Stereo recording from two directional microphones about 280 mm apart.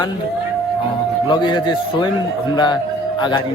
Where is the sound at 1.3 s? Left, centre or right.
Centre.